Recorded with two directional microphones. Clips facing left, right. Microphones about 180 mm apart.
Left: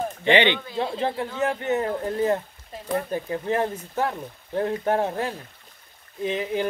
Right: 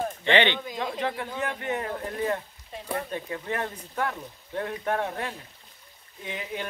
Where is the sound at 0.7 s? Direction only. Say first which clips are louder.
Left 4 dB; 30° left (ahead or behind).